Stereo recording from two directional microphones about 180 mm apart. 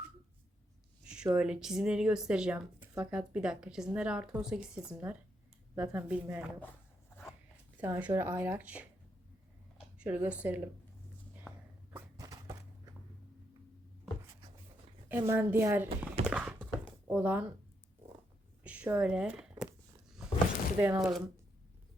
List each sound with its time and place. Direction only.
1.0 s speech: 5° right (ahead or behind)
7.8 s speech: 10° right (ahead or behind)
10.0 s speech: 10° right (ahead or behind)
11.9 s a sound: 15° right (ahead or behind)
15.1 s speech: 10° right (ahead or behind)
16.2 s clip-clop: 5° right (ahead or behind)
17.1 s speech: 10° right (ahead or behind)
18.6 s speech: 5° right (ahead or behind)
20.8 s speech: 10° right (ahead or behind)